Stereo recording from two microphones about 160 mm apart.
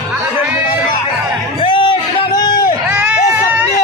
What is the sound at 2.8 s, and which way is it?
Music, 10° right (ahead or behind).